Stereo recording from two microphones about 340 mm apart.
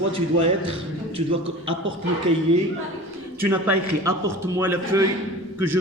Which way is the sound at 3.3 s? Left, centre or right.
Centre.